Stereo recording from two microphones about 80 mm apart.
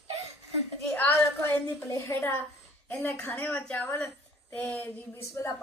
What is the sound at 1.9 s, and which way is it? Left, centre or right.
Speech, left.